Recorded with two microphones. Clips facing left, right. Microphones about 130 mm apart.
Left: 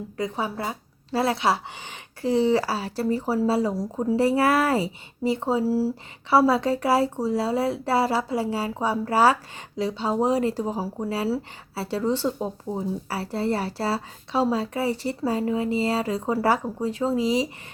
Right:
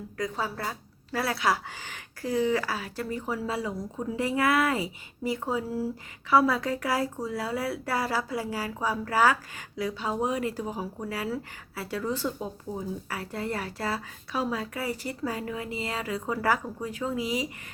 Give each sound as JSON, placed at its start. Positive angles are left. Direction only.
{"t": 0.2, "sound": "a woman's voice", "side_deg": 20}